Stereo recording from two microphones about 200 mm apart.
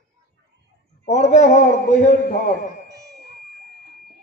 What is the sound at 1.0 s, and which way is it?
A man's voice, 35° left (ahead or behind).